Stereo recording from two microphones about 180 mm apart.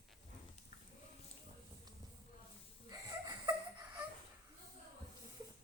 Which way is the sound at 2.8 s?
20° right (ahead or behind).